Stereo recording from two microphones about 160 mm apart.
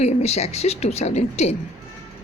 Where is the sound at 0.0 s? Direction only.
45° left (ahead or behind).